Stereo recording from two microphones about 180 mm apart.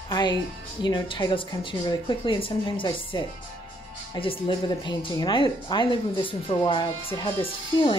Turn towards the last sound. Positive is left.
turn(degrees=30)  # may be behind; listen again after turning